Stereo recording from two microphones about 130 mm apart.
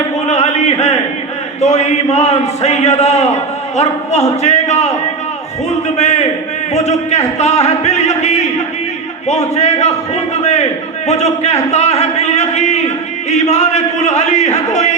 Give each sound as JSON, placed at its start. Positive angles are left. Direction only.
{"t": 0.3, "sound": "a sound", "side_deg": 60}
{"t": 1.6, "sound": "a man's voice", "side_deg": 60}
{"t": 6.0, "sound": "a man's voice", "side_deg": 60}